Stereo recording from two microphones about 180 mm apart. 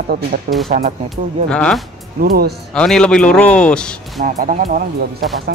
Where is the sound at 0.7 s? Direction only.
55° right (ahead or behind).